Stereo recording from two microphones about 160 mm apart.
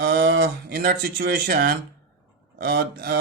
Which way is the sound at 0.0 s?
75° right (ahead or behind).